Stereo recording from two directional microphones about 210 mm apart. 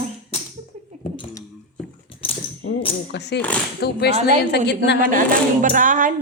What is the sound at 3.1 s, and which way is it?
A woman's voice, 55° left (ahead or behind).